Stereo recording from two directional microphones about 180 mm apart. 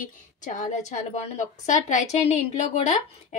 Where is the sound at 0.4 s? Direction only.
45° left (ahead or behind).